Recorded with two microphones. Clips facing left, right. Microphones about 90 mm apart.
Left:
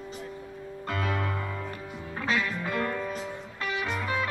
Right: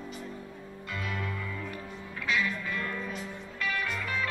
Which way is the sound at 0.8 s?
55° left (ahead or behind).